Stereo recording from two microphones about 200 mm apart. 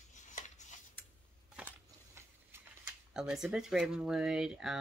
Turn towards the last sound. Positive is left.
turn(degrees=0)  # may be behind; listen again after turning